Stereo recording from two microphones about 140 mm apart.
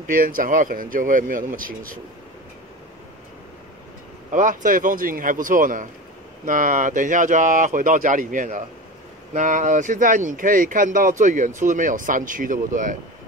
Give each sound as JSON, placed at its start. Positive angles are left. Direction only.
{"t": 0.1, "sound": "speech", "side_deg": -90}
{"t": 4.3, "sound": "speech", "side_deg": -70}